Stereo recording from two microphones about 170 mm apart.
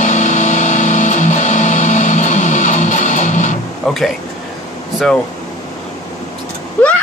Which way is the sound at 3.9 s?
5° left (ahead or behind).